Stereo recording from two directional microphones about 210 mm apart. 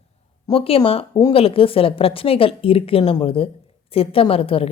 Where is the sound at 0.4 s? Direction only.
25° left (ahead or behind).